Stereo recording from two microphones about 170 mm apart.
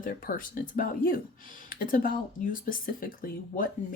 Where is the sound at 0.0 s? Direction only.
55° left (ahead or behind).